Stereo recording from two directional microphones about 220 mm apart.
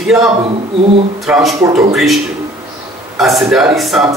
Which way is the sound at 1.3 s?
Centre (ahead or behind).